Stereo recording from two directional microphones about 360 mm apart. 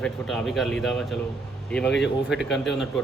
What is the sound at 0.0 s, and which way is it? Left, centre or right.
A man's voice, centre.